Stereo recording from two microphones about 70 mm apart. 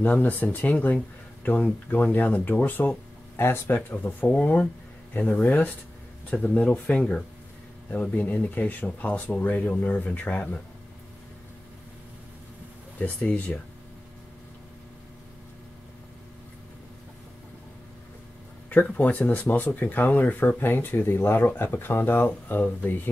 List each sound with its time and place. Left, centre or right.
0.0 s speech: left
3.3 s speech: left
13.0 s speech: left
18.9 s speech: left